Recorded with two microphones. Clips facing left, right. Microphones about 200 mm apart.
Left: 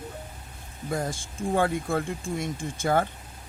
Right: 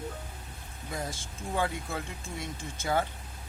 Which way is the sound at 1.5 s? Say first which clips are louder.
Left 7 dB; 50° left (ahead or behind).